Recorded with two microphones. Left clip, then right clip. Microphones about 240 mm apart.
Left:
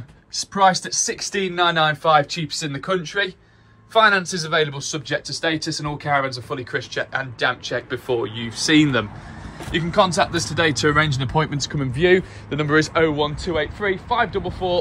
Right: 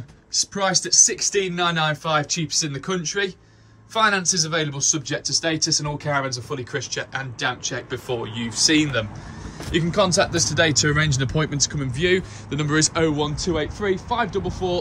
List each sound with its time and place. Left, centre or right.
0.3 s speech: centre
8.6 s speech: centre
12.4 s speech: centre